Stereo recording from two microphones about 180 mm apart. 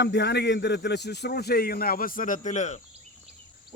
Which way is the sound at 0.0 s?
80° left.